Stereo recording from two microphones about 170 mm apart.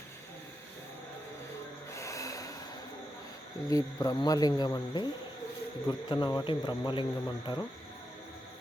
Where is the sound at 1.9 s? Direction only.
20° left (ahead or behind).